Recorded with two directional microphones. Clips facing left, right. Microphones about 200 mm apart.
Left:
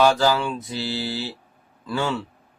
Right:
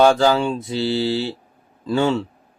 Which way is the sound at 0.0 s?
25° right (ahead or behind).